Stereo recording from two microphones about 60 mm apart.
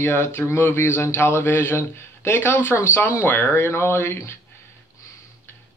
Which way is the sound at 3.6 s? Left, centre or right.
Left.